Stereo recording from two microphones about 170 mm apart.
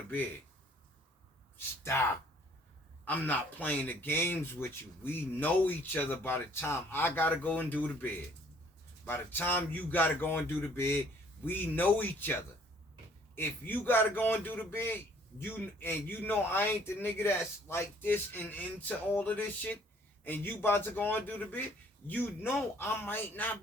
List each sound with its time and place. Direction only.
1.5 s speech: 15° left (ahead or behind)